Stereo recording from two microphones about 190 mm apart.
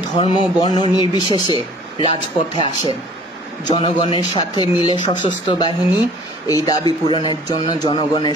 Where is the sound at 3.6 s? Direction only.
25° left (ahead or behind).